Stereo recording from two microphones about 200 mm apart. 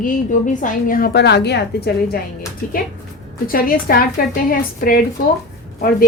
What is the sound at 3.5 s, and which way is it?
A woman's voice, 45° left (ahead or behind).